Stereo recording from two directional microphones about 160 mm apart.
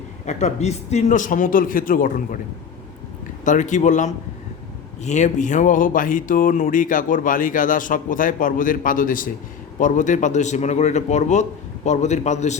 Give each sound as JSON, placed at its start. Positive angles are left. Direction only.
{"t": 0.3, "sound": "speech", "side_deg": 45}
{"t": 3.4, "sound": "a man's voice", "side_deg": 50}